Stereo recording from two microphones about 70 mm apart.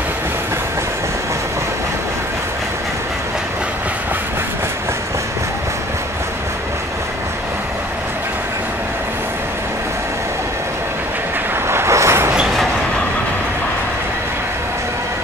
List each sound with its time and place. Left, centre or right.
11.7 s vehicle: right